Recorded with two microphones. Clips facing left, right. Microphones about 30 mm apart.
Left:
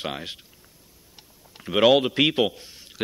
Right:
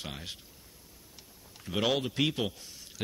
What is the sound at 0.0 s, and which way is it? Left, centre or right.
Speech, left.